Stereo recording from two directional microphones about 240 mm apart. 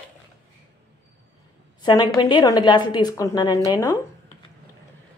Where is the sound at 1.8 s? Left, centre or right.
Centre.